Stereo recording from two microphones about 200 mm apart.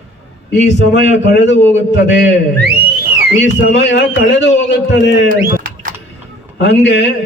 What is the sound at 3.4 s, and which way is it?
A man's voice, 60° left (ahead or behind).